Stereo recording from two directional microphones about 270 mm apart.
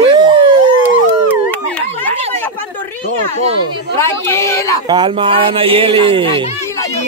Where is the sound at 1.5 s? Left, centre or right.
Centre.